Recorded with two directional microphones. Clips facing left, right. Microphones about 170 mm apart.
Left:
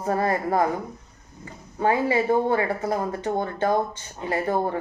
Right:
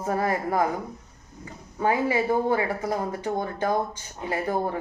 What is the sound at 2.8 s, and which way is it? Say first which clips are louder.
Speech: left 2 dB; 25° left (ahead or behind).